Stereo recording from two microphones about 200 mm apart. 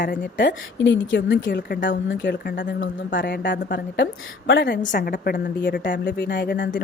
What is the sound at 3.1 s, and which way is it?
Speech, 60° left (ahead or behind).